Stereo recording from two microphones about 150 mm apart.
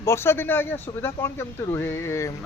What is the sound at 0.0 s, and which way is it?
Speech, 15° left (ahead or behind).